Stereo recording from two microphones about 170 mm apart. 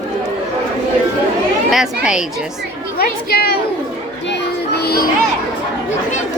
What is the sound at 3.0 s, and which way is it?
Speech, 65° left (ahead or behind).